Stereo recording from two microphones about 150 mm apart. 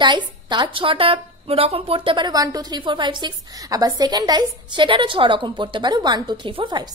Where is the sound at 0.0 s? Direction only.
30° right (ahead or behind).